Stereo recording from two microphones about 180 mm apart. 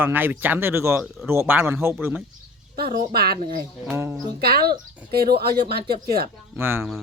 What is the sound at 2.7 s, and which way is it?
Speech, 60° right (ahead or behind).